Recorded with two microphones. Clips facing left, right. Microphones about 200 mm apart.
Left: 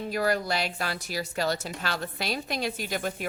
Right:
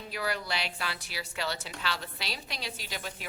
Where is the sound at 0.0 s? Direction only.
45° left (ahead or behind).